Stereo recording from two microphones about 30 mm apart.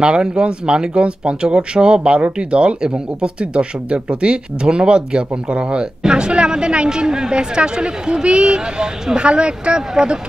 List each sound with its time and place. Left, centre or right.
0.0 s speech: right
6.9 s speech: right